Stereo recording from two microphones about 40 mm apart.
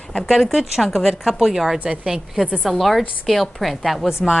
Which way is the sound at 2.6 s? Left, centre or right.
Centre.